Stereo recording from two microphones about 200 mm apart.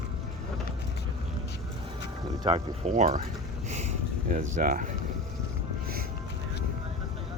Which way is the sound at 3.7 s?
35° right (ahead or behind).